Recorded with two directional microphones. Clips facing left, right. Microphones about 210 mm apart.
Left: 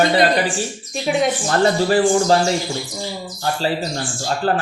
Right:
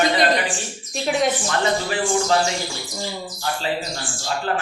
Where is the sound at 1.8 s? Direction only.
40° left (ahead or behind).